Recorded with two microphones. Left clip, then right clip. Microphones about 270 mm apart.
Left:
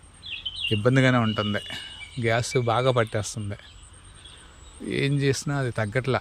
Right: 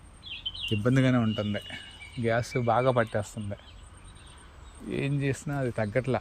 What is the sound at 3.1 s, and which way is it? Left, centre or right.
Speech, left.